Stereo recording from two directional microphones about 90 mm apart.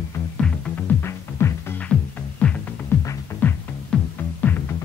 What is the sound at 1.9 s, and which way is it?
Music, 10° left (ahead or behind).